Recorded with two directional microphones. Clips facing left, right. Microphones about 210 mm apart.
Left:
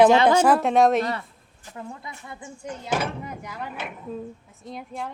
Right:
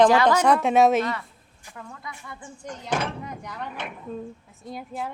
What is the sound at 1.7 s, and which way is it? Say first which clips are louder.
Speech: left 3 dB; 25° left (ahead or behind).